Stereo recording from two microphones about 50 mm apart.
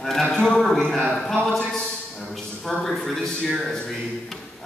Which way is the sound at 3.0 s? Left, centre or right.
Centre.